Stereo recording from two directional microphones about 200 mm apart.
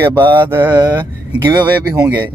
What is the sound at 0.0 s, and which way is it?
Speech, 10° right (ahead or behind).